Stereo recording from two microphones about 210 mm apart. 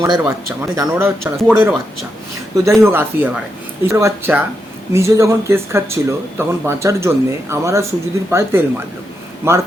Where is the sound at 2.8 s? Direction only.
10° right (ahead or behind).